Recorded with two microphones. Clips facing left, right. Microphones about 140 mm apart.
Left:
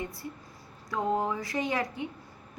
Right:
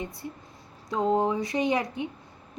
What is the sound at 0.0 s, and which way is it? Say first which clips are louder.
A woman's voice: right 1 dB; 20° right (ahead or behind).